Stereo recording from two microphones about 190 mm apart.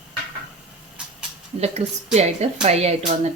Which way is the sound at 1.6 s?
35° right (ahead or behind).